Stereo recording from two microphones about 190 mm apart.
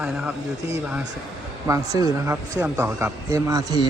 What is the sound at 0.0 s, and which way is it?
Speech, 5° right (ahead or behind).